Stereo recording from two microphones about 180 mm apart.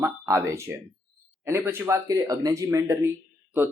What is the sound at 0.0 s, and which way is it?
Speech, 15° right (ahead or behind).